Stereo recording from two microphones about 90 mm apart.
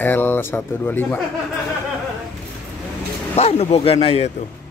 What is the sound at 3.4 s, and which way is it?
Speech, 90° left.